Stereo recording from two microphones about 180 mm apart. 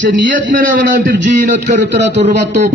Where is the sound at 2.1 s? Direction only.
70° right (ahead or behind).